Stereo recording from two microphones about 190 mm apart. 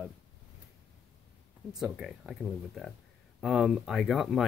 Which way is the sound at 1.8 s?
Centre (ahead or behind).